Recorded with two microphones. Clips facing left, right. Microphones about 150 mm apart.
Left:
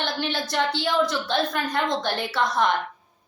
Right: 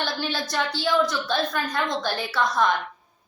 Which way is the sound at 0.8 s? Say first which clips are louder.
Even; 20° left (ahead or behind).